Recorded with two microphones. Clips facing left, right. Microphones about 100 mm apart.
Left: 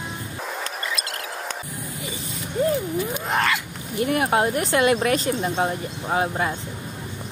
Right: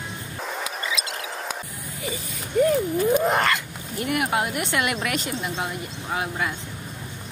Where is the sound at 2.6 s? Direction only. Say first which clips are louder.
Right 3 dB; 25° left (ahead or behind).